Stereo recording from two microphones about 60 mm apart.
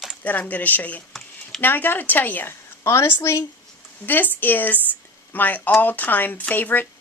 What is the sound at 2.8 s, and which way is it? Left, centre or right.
Speech, left.